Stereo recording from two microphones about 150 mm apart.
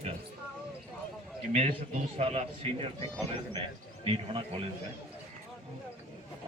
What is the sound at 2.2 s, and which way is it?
Speech, 45° right (ahead or behind).